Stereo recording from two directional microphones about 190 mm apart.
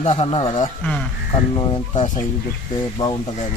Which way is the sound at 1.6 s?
25° left (ahead or behind).